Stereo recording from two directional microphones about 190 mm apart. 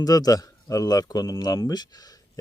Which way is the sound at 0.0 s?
20° left (ahead or behind).